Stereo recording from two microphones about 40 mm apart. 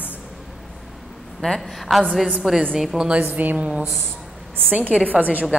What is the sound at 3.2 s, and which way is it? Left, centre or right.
A woman's voice, right.